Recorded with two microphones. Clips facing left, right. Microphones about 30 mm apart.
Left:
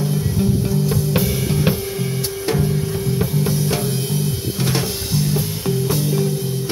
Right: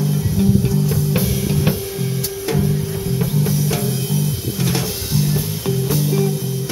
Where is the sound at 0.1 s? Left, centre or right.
Centre.